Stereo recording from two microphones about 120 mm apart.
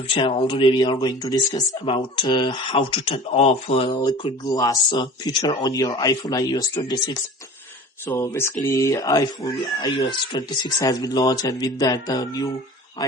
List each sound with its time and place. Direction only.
0.1 s speech: 45° left (ahead or behind)
1.8 s speech: 45° left (ahead or behind)
4.4 s speech: 30° left (ahead or behind)
8.0 s speech: 20° left (ahead or behind)